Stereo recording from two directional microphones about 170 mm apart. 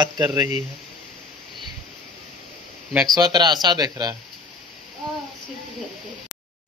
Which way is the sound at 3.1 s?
25° right (ahead or behind).